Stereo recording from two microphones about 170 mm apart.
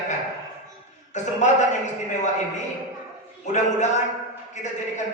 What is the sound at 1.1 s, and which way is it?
Speech, 45° left (ahead or behind).